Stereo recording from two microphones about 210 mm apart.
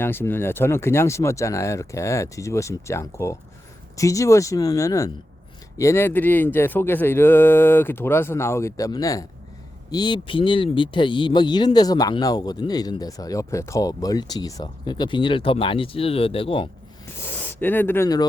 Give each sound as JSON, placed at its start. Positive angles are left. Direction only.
{"t": 0.0, "sound": "speech", "side_deg": 10}
{"t": 17.5, "sound": "speech", "side_deg": 10}